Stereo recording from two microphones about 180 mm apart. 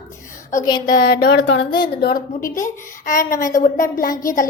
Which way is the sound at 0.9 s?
55° left (ahead or behind).